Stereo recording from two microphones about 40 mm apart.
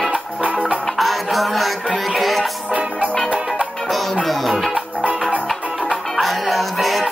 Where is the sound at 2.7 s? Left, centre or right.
Right.